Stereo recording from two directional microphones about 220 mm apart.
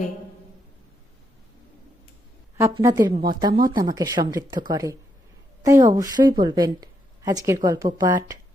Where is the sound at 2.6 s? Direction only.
15° right (ahead or behind).